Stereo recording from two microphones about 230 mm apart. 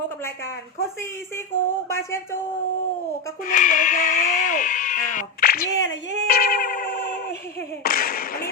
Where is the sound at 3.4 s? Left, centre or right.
Left.